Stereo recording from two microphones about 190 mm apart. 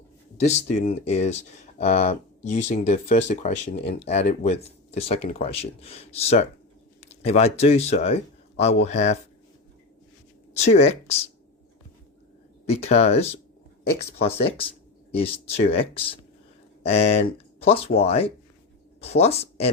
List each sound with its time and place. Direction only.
0.3 s a man's voice: 35° left (ahead or behind)
10.6 s speech: 35° left (ahead or behind)
12.6 s speech: 35° left (ahead or behind)